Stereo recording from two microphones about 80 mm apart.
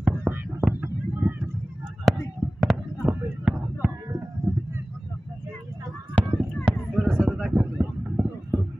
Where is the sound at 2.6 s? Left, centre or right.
Centre.